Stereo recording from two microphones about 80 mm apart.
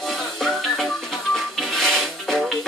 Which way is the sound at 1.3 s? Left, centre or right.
Centre.